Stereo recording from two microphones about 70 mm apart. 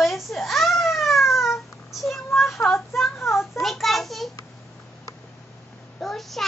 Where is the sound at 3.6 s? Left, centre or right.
Centre.